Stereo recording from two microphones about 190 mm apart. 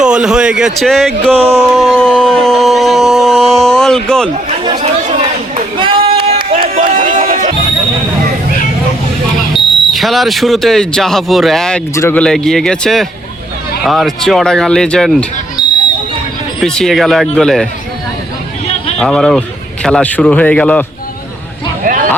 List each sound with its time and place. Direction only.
0.0 s speech: 5° right (ahead or behind)
1.4 s speech: 30° right (ahead or behind)
1.7 s a sound: centre (ahead or behind)
4.6 s chatter: 30° right (ahead or behind)
9.9 s speech: centre (ahead or behind)
16.6 s speech: centre (ahead or behind)
18.9 s speech: centre (ahead or behind)
21.8 s a sound: 45° right (ahead or behind)